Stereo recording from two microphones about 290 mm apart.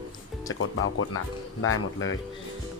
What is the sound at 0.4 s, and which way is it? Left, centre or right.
Speech, left.